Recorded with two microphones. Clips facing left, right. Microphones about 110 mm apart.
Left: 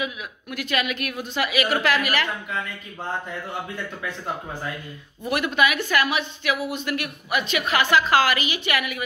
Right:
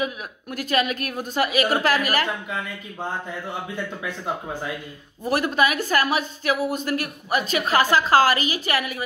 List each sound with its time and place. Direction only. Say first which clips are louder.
0.0 s a woman's voice: right 3 dB; 40° right (ahead or behind)
5.2 s a woman's voice: right 1 dB; 35° right (ahead or behind)